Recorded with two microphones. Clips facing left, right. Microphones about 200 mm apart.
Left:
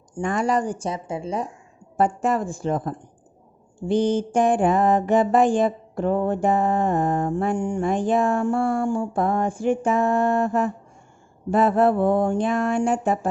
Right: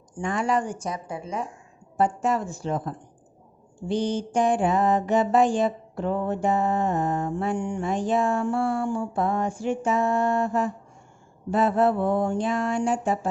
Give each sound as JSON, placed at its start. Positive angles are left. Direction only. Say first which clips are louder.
{"t": 0.2, "sound": "speech", "louder": "left 3 dB", "side_deg": 45}
{"t": 2.0, "sound": "mantra", "louder": "left 2 dB", "side_deg": 55}